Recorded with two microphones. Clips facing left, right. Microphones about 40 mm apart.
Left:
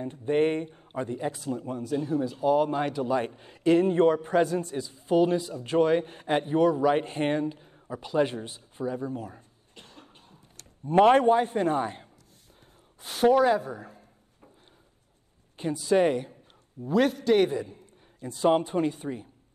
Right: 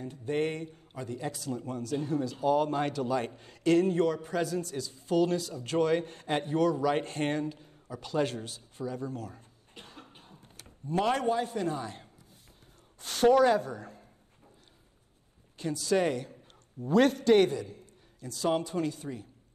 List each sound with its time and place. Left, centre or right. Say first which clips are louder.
0.0 s a man's voice: left 6 dB; left
9.8 s cough: right 1 dB; centre
10.9 s a man's voice: left 9 dB; left
13.0 s a woman's voice: left 1 dB; centre
15.5 s a man's voice: left 4 dB; left
16.8 s a man's voice: even; centre
17.5 s a man's voice: left 3 dB; left